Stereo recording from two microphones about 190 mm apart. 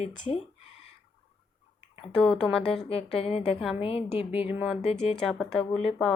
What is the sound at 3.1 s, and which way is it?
A woman's voice, 30° left (ahead or behind).